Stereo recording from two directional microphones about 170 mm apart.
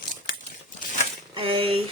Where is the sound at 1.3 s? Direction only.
30° right (ahead or behind).